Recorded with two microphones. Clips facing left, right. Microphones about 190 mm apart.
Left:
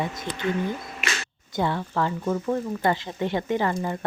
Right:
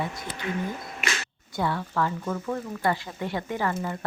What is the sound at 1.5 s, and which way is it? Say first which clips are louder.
Speech: left 2 dB; 25° left (ahead or behind).